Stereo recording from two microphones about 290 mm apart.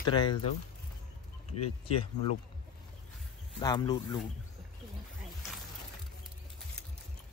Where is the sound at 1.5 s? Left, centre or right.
Left.